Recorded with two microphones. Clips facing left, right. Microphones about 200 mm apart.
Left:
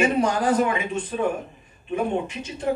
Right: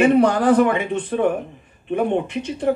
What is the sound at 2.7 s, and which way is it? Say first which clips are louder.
Speech: right 4 dB; 50° right (ahead or behind).